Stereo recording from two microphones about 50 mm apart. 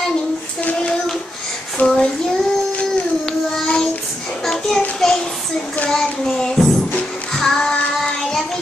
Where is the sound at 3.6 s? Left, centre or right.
Centre.